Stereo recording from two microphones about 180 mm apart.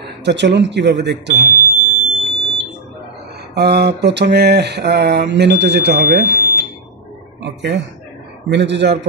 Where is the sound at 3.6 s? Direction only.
70° right (ahead or behind).